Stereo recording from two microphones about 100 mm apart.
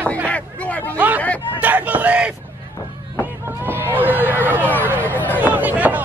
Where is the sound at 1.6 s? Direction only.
15° right (ahead or behind).